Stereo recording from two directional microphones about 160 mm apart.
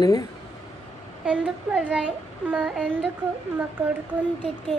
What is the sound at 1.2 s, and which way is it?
A child's voice, 10° right (ahead or behind).